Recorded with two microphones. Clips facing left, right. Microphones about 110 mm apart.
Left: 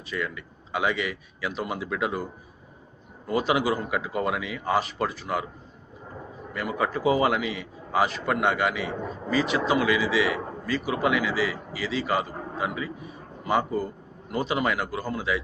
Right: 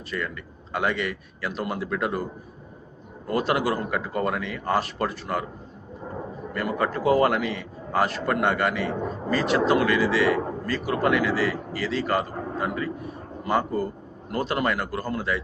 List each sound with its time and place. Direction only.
0.1 s a man's voice: 5° left (ahead or behind)
3.2 s a man's voice: centre (ahead or behind)
6.5 s a man's voice: 5° left (ahead or behind)